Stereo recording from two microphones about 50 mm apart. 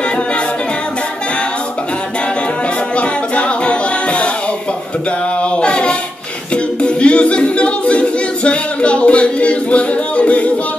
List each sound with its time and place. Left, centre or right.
3.0 s music: left
5.4 s child singing: left
6.5 s a capella: left